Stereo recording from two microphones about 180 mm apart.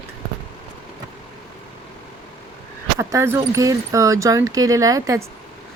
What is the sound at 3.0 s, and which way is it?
Speech, 15° right (ahead or behind).